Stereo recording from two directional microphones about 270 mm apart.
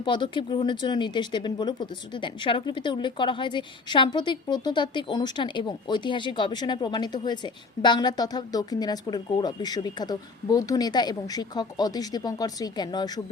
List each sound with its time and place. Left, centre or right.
0.0 s speech: centre